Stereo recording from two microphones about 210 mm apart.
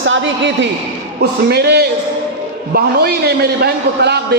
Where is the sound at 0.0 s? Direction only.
60° right (ahead or behind).